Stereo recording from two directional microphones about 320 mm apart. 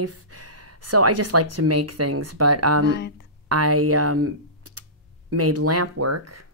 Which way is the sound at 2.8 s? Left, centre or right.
Left.